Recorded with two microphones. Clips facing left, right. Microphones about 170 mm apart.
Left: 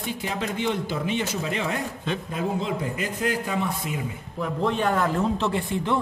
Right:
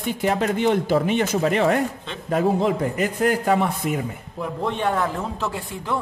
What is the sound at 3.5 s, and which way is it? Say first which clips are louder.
Speech: right 7 dB; 75° right (ahead or behind).